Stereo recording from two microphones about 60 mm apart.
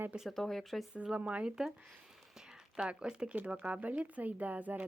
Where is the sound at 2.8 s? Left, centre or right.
Centre.